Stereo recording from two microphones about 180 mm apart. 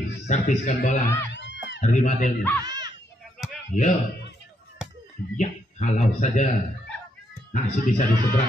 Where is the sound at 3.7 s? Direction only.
45° left (ahead or behind).